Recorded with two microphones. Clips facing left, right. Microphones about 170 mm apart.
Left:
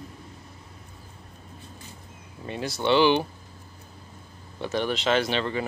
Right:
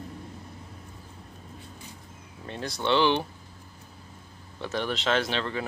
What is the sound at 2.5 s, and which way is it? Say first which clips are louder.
Speech: left 3 dB; 5° left (ahead or behind).